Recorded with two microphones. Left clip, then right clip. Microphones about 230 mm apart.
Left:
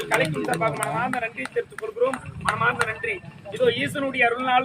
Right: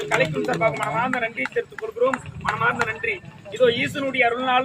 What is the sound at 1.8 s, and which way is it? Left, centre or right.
Speech, left.